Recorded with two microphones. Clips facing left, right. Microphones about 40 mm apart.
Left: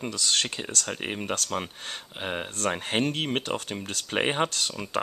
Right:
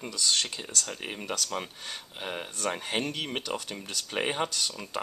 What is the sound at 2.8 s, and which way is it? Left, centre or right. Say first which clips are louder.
Speech: left 4 dB; left.